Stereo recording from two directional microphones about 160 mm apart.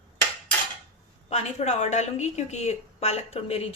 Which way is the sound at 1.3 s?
45° left (ahead or behind).